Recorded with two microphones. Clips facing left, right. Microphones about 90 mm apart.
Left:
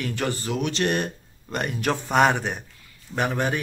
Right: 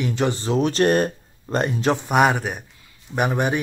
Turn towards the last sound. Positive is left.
turn(degrees=-15)  # may be behind; listen again after turning